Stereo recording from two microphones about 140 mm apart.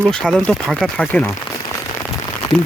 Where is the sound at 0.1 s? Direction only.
5° left (ahead or behind).